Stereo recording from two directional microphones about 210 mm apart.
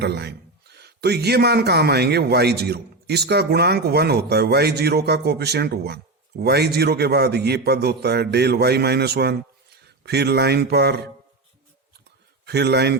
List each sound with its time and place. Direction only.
0.0 s a man's voice: 55° right (ahead or behind)
12.5 s a man's voice: 50° right (ahead or behind)